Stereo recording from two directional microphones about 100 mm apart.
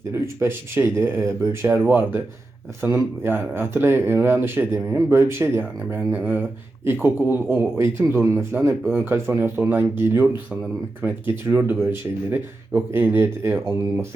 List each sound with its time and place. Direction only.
0.1 s speech: 25° right (ahead or behind)